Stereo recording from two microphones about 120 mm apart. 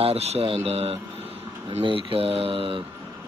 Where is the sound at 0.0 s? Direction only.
60° right (ahead or behind).